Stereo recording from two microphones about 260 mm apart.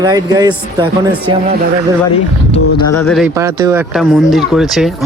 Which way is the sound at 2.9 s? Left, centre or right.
Centre.